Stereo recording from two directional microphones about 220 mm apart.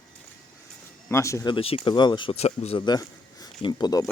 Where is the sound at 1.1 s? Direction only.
15° left (ahead or behind).